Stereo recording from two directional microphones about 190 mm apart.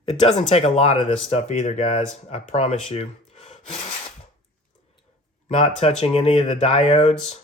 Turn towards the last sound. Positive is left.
turn(degrees=35)  # may be behind; listen again after turning